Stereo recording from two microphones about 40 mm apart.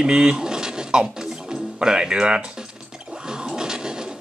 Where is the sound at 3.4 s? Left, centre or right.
Centre.